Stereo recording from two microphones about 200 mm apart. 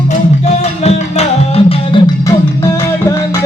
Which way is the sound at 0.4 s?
30° left (ahead or behind).